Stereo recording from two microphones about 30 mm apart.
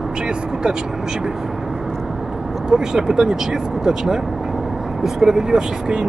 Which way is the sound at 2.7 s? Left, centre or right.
Right.